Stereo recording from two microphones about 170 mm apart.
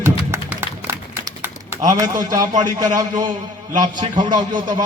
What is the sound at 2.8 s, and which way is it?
A man's voice, 25° right (ahead or behind).